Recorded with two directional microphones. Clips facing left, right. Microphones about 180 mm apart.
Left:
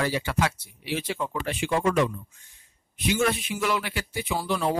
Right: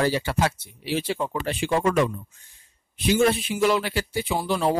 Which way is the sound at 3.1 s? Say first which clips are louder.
Right 4 dB; 30° right (ahead or behind).